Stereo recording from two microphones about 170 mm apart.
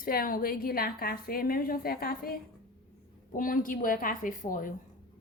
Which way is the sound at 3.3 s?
55° left (ahead or behind).